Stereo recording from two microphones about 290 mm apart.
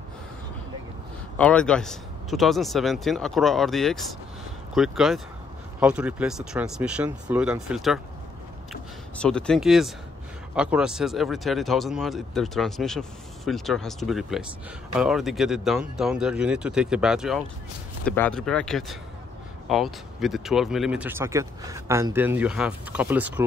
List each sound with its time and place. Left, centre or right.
1.4 s speech: centre
9.2 s speech: centre